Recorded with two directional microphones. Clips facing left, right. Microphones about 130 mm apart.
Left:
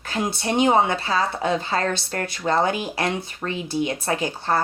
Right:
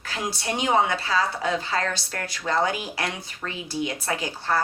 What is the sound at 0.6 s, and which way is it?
A woman's voice, 25° left (ahead or behind).